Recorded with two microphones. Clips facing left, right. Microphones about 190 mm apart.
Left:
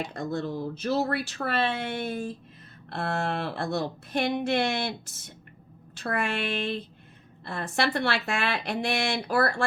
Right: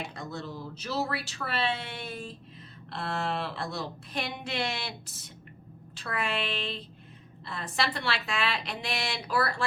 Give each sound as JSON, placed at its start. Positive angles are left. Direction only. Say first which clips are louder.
{"t": 0.1, "sound": "a woman's voice", "louder": "left 8 dB", "side_deg": 50}